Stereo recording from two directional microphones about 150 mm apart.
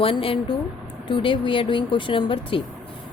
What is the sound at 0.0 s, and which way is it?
Speech, 35° left (ahead or behind).